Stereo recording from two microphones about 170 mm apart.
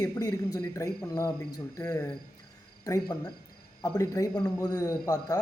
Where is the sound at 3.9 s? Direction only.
20° left (ahead or behind).